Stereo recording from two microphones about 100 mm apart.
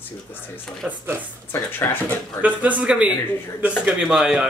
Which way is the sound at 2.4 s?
15° right (ahead or behind).